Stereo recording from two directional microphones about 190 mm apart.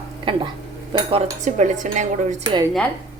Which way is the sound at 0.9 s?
30° right (ahead or behind).